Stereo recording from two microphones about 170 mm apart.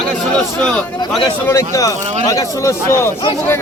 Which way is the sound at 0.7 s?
10° left (ahead or behind).